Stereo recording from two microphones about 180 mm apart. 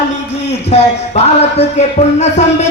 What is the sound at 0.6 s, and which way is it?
Speech, 35° left (ahead or behind).